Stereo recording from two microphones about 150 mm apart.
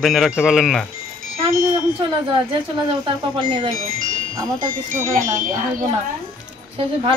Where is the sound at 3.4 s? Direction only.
35° right (ahead or behind).